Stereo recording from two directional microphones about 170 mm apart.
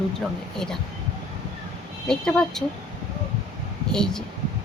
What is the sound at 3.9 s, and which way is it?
Speech, 5° left (ahead or behind).